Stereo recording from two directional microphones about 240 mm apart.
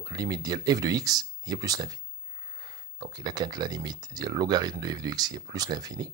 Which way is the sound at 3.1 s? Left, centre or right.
Centre.